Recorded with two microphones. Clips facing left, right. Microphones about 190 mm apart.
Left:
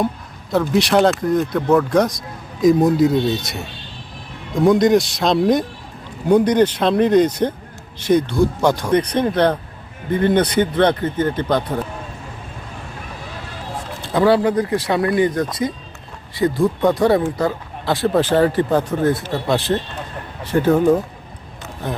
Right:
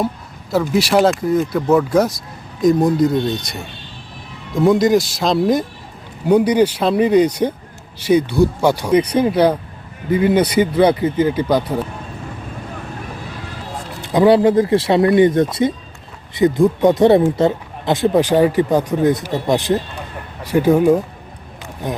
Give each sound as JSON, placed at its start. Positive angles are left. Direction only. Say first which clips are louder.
{"t": 0.5, "sound": "speech", "louder": "right 1 dB", "side_deg": -5}
{"t": 14.0, "sound": "speech", "louder": "right 3 dB", "side_deg": -15}